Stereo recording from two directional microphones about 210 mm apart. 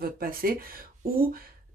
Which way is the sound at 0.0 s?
45° right (ahead or behind).